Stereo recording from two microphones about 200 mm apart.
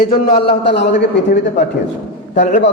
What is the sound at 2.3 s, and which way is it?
Speech, 35° left (ahead or behind).